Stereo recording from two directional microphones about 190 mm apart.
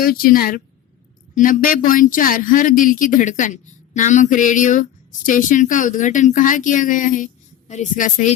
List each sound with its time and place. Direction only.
0.0 s a woman's voice: 50° left (ahead or behind)